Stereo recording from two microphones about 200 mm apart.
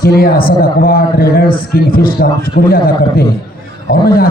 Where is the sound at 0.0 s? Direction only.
50° left (ahead or behind).